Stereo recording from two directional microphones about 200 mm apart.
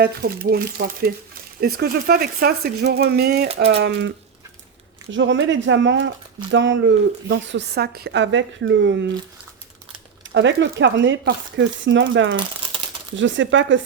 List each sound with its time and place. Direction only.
0.0 s speech: 50° right (ahead or behind)
5.1 s speech: 65° right (ahead or behind)
10.3 s speech: 65° right (ahead or behind)